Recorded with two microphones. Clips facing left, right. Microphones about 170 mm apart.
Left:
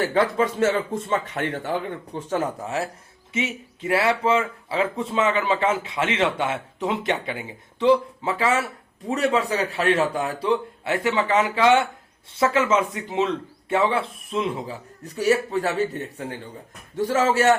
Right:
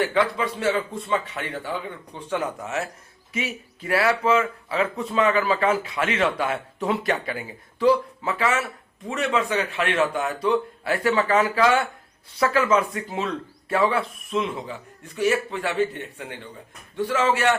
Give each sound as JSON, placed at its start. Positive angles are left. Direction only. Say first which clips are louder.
{"t": 0.0, "sound": "a man's voice", "louder": "left 2 dB", "side_deg": 40}